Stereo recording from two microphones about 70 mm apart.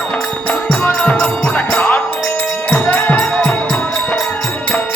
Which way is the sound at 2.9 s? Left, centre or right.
Left.